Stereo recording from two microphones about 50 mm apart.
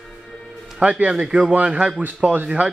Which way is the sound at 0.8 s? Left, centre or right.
Right.